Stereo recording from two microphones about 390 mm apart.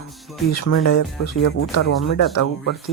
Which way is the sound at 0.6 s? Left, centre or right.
Left.